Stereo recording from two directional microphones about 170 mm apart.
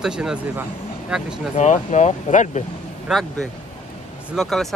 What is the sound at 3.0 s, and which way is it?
Speech, centre (ahead or behind).